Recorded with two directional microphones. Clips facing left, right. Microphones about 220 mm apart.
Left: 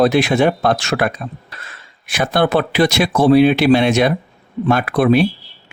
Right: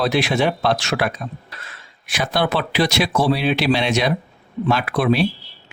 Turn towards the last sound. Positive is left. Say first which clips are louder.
# left 5 dB
turn(degrees=50)  # may be behind; listen again after turning